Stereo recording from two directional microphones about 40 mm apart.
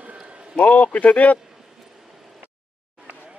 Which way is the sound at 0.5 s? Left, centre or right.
Left.